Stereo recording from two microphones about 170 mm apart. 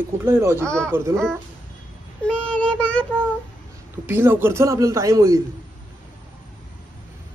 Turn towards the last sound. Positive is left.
turn(degrees=-20)  # may be behind; listen again after turning